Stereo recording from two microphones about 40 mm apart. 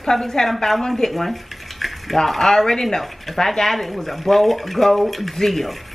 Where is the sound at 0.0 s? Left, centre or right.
Centre.